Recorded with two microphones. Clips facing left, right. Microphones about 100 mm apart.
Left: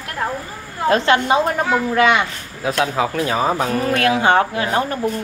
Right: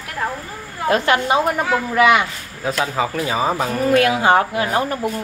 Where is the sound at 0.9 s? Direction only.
25° left (ahead or behind).